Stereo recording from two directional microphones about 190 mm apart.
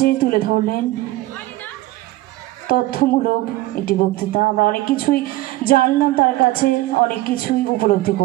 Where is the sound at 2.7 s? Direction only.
50° left (ahead or behind).